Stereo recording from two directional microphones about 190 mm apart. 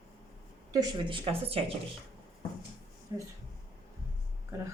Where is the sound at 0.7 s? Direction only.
25° right (ahead or behind).